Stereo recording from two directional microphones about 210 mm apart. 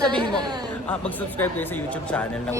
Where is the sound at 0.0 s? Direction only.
20° right (ahead or behind).